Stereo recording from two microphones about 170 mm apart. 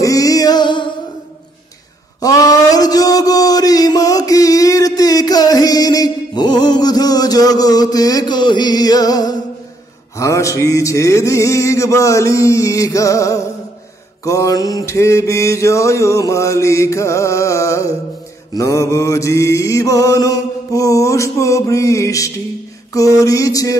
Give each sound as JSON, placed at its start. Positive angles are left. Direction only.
{"t": 0.0, "sound": "music", "side_deg": 20}
{"t": 2.2, "sound": "mantra", "side_deg": 20}
{"t": 22.9, "sound": "a sound", "side_deg": 20}